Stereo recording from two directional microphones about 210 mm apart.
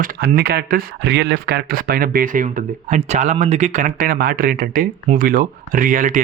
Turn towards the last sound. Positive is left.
turn(degrees=-40)  # may be behind; listen again after turning